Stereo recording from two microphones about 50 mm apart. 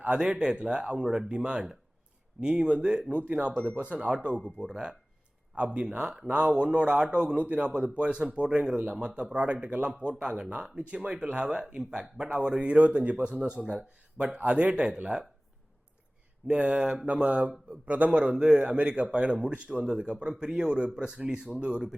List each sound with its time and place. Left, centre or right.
0.0 s speech: right
1.0 s speech: centre
1.3 s speech: right
11.4 s speech: centre
16.5 s speech: right